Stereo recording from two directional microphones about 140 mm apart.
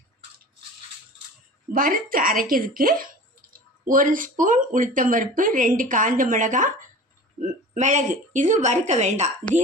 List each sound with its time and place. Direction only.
1.7 s a woman's voice: 85° right
3.8 s a woman's voice: 75° right (ahead or behind); by 9.3 s 55° right (ahead or behind)